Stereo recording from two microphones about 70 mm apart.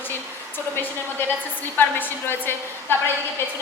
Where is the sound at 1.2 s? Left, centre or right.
Left.